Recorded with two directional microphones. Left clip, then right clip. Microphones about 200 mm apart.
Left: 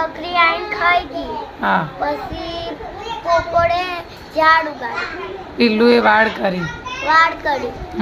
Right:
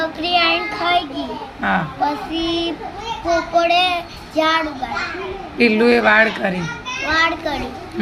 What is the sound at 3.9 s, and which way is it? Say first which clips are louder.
Child singing: right 4 dB; 25° left (ahead or behind).